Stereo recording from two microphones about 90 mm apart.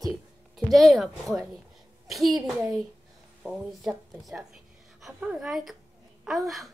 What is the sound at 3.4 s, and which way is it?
Speech, 20° right (ahead or behind).